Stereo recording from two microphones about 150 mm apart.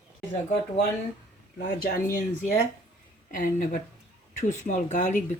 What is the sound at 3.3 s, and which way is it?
Speech, 65° left (ahead or behind).